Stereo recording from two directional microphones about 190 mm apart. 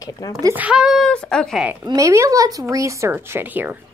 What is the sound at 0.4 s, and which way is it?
Speech, 15° right (ahead or behind).